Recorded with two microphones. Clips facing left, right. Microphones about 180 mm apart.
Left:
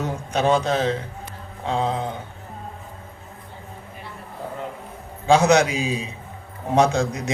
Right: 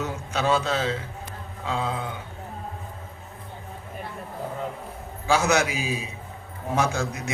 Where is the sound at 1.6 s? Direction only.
35° left (ahead or behind).